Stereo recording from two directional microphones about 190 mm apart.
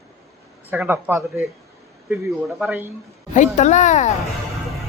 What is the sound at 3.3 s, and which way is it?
Speech, 40° left (ahead or behind).